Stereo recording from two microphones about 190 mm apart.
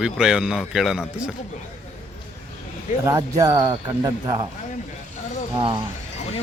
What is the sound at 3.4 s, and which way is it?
Speech, 20° right (ahead or behind).